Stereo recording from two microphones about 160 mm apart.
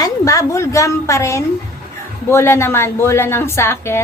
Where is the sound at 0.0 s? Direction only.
20° left (ahead or behind).